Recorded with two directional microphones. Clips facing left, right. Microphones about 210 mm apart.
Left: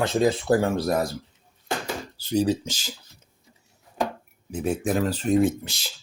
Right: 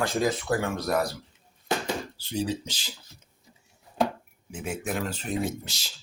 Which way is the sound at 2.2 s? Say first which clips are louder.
Left 12 dB; 40° left (ahead or behind).